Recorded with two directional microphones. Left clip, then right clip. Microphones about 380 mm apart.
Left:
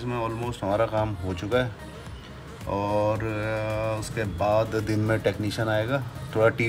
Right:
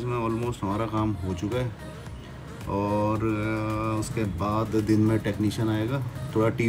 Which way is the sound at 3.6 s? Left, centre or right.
Centre.